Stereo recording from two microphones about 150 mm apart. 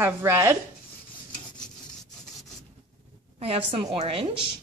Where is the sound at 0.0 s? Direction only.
15° right (ahead or behind).